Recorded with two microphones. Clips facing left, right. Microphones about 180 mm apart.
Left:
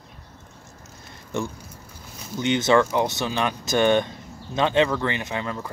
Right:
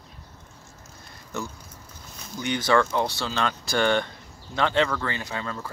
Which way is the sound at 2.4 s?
25° left (ahead or behind).